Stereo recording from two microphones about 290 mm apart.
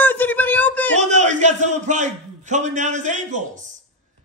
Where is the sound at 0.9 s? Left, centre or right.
Right.